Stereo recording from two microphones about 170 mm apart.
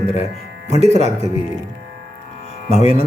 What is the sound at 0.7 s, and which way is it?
Speech, 40° right (ahead or behind).